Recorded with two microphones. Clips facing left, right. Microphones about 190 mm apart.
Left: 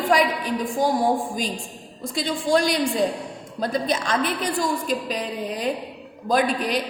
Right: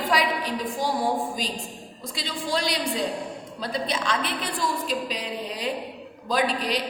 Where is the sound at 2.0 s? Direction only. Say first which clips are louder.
Left 7 dB; 50° left (ahead or behind).